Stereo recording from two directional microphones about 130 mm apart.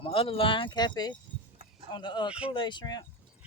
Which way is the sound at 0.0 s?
45° left (ahead or behind).